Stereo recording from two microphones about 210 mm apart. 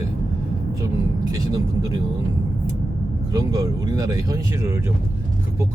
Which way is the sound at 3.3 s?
15° right (ahead or behind).